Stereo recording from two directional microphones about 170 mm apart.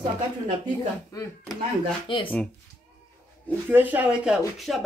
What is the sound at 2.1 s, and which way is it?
Speech, 30° left (ahead or behind).